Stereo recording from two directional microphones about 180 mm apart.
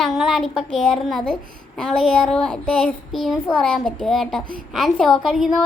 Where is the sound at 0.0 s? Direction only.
Centre (ahead or behind).